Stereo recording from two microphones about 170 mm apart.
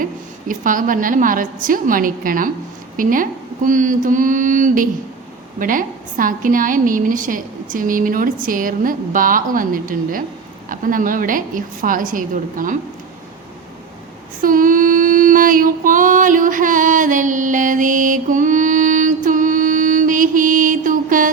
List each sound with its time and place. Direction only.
0.0 s a woman's voice: 50° right (ahead or behind)
14.4 s female singing: 55° right (ahead or behind)